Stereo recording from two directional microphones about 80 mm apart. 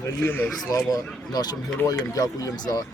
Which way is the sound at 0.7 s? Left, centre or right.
Left.